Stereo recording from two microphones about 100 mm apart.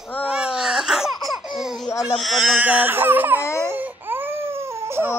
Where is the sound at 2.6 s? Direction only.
15° right (ahead or behind).